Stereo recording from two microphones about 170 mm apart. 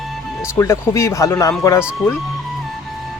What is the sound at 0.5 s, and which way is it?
Speech, 15° left (ahead or behind).